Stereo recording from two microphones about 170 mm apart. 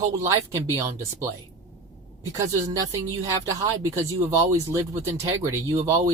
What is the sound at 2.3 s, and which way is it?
Speech, 20° right (ahead or behind).